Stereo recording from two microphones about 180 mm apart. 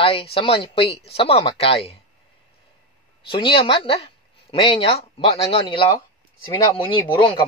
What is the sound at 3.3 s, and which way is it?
A man's voice, 30° left (ahead or behind).